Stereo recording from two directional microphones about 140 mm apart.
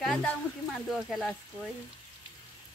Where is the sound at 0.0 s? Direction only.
5° left (ahead or behind).